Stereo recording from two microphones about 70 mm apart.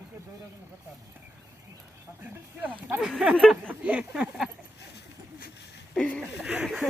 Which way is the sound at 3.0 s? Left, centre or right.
Centre.